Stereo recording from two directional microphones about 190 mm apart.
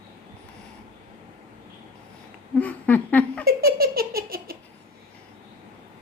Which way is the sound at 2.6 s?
10° left (ahead or behind).